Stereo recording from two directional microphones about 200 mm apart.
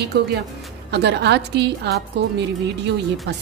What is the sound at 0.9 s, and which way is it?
Speech, 60° right (ahead or behind).